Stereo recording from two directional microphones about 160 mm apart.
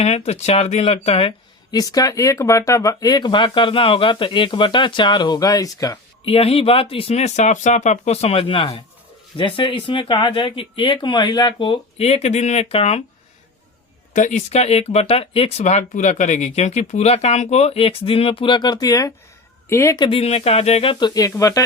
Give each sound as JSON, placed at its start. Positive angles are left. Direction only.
{"t": 0.0, "sound": "speech", "side_deg": 45}
{"t": 1.7, "sound": "speech", "side_deg": 25}
{"t": 6.2, "sound": "speech", "side_deg": 35}
{"t": 14.1, "sound": "speech", "side_deg": 50}
{"t": 20.1, "sound": "speech", "side_deg": 40}
{"t": 20.9, "sound": "speech", "side_deg": 25}